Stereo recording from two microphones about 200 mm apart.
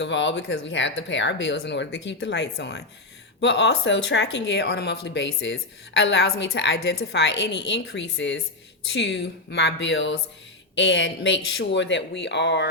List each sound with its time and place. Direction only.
0.0 s speech: 65° left (ahead or behind)